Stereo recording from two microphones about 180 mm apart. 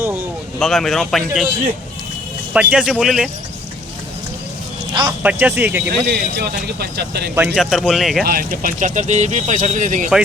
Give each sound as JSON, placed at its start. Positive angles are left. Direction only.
{"t": 0.0, "sound": "speech", "side_deg": -10}
{"t": 0.6, "sound": "a man's voice", "side_deg": 0}
{"t": 5.2, "sound": "speech", "side_deg": -10}
{"t": 6.1, "sound": "speech", "side_deg": -65}
{"t": 7.3, "sound": "a man's voice", "side_deg": -5}
{"t": 8.2, "sound": "speech", "side_deg": -55}